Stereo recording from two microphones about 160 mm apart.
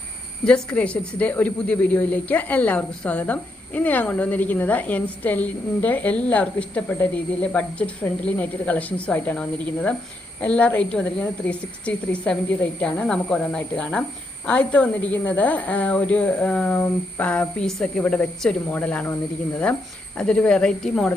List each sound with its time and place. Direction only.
0.4 s a woman's voice: 5° left (ahead or behind)
20.1 s speech: 5° left (ahead or behind)